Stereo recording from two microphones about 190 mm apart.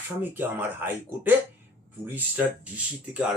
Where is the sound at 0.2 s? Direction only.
10° right (ahead or behind).